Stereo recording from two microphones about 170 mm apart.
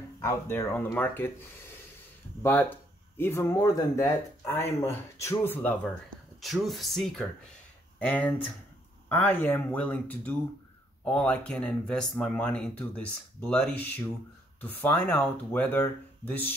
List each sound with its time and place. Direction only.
0.2 s speech: 15° left (ahead or behind)
2.4 s speech: 10° left (ahead or behind)
6.4 s speech: centre (ahead or behind)